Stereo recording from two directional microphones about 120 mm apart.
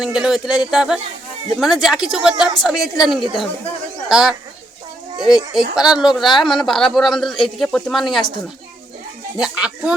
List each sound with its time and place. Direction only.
0.0 s speech: 5° right (ahead or behind)
9.4 s speech: 5° right (ahead or behind)